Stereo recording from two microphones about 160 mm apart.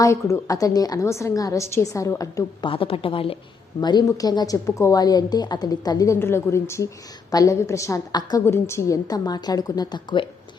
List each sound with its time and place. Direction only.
0.0 s a woman's voice: 20° left (ahead or behind)
2.6 s a woman's voice: 35° left (ahead or behind)